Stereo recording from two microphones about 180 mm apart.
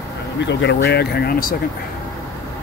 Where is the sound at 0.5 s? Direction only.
75° left (ahead or behind).